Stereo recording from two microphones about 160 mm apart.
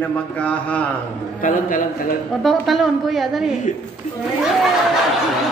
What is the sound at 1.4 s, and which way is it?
Speech, 55° left (ahead or behind).